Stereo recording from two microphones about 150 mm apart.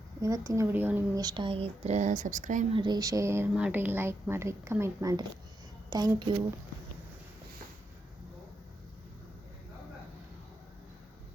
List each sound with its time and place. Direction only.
0.2 s speech: 20° right (ahead or behind)
1.1 s speech: 25° right (ahead or behind); by 2.6 s 55° right (ahead or behind)
2.7 s a woman's voice: 30° right (ahead or behind)